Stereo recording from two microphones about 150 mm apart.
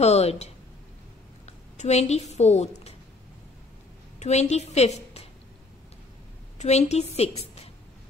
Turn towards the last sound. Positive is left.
turn(degrees=45)  # may be behind; listen again after turning